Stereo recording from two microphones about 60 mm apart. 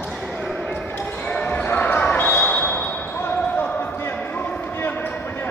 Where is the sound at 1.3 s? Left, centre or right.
Left.